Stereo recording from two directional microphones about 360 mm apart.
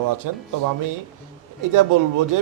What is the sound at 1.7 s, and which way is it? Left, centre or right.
Speech, right.